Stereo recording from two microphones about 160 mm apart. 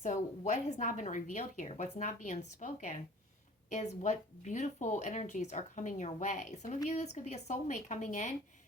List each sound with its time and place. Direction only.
0.0 s speech: 50° left (ahead or behind)